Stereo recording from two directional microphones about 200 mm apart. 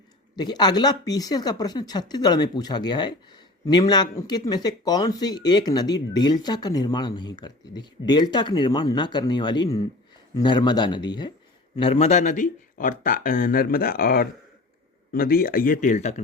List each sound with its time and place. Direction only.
0.3 s speech: 20° left (ahead or behind); by 16.2 s 35° left (ahead or behind)